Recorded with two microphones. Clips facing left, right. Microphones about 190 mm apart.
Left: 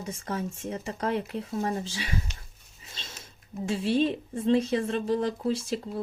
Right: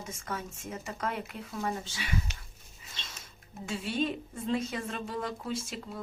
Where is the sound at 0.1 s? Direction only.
30° left (ahead or behind).